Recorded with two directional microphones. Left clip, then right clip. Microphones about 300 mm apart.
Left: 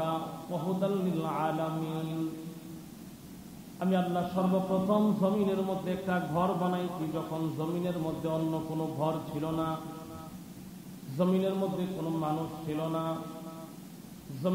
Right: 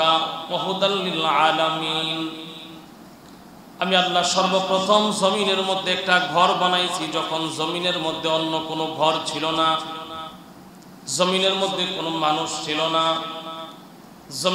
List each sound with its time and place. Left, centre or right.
0.0 s a sound: centre
0.4 s a man's voice: right
0.7 s a man's voice: centre
3.8 s a man's voice: centre
11.1 s a man's voice: centre
14.4 s a man's voice: centre